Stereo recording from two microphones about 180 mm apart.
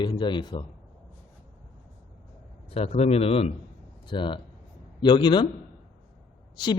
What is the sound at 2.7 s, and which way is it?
A man's voice, 35° left (ahead or behind).